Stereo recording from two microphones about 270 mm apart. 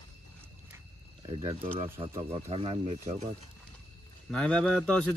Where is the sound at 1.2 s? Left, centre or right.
Centre.